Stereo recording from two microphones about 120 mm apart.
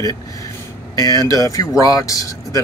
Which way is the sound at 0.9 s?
30° left (ahead or behind).